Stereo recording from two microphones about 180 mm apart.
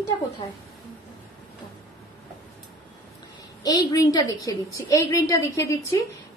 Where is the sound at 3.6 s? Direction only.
20° left (ahead or behind).